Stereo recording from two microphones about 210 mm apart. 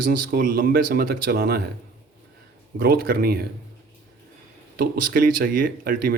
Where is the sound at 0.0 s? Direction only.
40° right (ahead or behind).